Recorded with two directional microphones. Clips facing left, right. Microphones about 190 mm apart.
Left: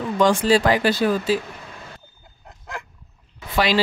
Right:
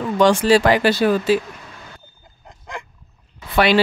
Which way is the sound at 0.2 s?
75° right (ahead or behind).